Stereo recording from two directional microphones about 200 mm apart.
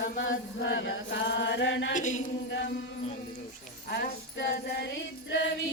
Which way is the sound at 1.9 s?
40° left (ahead or behind).